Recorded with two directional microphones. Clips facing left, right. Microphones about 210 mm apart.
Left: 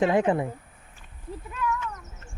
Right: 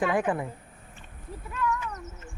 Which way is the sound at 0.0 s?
25° left (ahead or behind).